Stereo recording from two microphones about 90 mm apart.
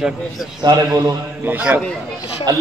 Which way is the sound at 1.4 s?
20° right (ahead or behind).